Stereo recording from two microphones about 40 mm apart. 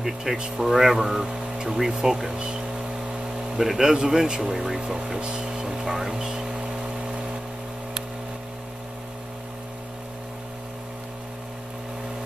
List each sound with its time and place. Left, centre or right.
0.0 s speech: centre
5.9 s music: centre
7.1 s vehicle: right